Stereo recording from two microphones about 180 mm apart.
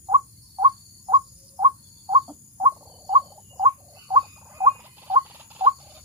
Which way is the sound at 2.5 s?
25° right (ahead or behind).